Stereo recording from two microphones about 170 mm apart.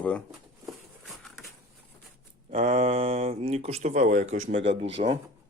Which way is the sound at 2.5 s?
40° right (ahead or behind).